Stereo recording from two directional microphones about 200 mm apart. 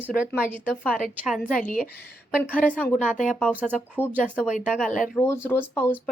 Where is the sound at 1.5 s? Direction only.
40° left (ahead or behind).